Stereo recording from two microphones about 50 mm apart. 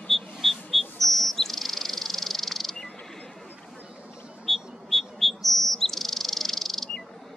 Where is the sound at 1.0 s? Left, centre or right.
Centre.